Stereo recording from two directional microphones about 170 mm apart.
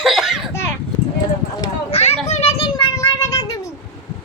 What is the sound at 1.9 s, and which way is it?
Children playing, 40° left (ahead or behind).